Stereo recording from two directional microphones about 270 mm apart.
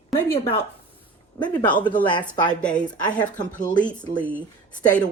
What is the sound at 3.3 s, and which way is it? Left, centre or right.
Speech, left.